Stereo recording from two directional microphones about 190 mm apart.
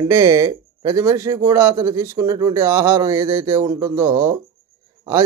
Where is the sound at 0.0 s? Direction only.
15° right (ahead or behind).